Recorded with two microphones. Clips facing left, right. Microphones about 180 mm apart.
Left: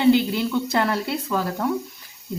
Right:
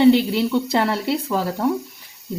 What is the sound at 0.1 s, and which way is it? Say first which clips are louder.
Speech: right 2 dB; 25° right (ahead or behind).